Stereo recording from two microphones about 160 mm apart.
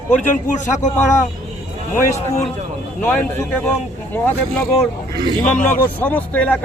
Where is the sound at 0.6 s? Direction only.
50° left (ahead or behind).